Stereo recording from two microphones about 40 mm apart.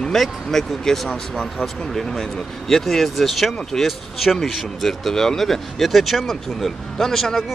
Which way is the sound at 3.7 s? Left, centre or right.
Centre.